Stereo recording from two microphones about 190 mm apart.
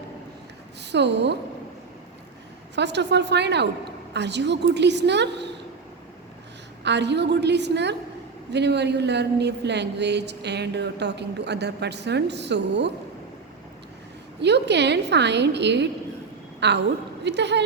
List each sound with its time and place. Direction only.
0.8 s a woman's voice: 65° right (ahead or behind)
2.7 s a woman's voice: 65° right (ahead or behind)
6.8 s a woman's voice: 65° right (ahead or behind)
14.4 s a woman's voice: 65° right (ahead or behind)